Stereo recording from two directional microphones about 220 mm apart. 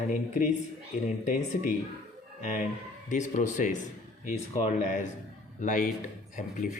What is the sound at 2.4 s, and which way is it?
Speech, 35° left (ahead or behind).